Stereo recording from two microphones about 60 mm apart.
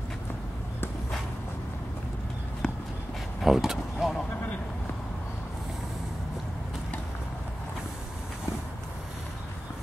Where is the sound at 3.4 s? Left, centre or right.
Centre.